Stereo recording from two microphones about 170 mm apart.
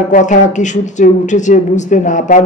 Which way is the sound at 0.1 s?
45° left (ahead or behind).